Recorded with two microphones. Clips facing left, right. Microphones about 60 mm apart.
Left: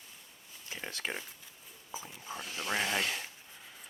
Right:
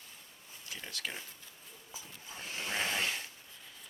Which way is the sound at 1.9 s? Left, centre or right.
Left.